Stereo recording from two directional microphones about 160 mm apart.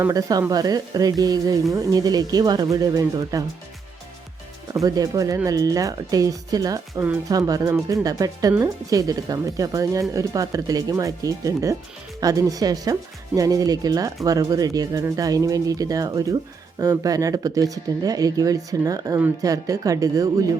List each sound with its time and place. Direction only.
0.0 s a woman's voice: 20° right (ahead or behind)
4.7 s a woman's voice: 20° right (ahead or behind)